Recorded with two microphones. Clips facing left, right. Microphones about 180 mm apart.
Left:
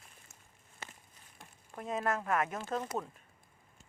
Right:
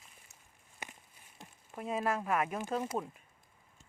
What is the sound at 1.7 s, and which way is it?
Speech, 10° right (ahead or behind).